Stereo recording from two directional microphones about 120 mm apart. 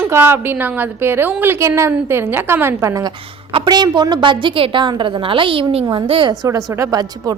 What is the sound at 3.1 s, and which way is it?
Speech, 50° right (ahead or behind).